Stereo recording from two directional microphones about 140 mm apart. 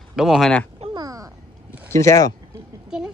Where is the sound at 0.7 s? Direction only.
45° right (ahead or behind).